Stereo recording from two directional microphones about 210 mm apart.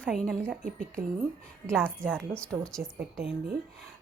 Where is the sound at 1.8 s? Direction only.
5° left (ahead or behind).